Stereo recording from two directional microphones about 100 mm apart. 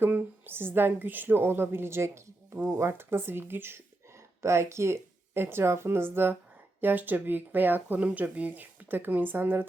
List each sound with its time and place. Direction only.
0.0 s speech: 20° right (ahead or behind)